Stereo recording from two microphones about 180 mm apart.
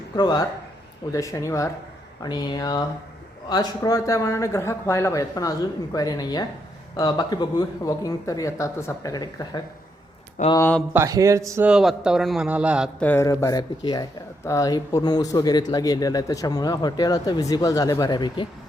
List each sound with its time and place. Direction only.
0.2 s speech: 20° left (ahead or behind)
10.9 s speech: 15° right (ahead or behind)
11.7 s a man's voice: 5° right (ahead or behind)
13.0 s speech: 10° left (ahead or behind)